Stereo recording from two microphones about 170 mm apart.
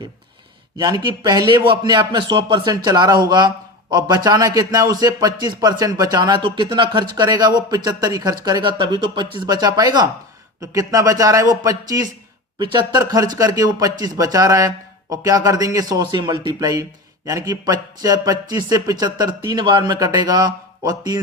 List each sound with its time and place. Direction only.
0.8 s speech: 25° right (ahead or behind)